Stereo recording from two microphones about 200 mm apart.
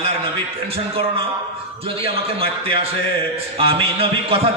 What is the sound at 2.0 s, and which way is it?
A man's voice, 30° right (ahead or behind).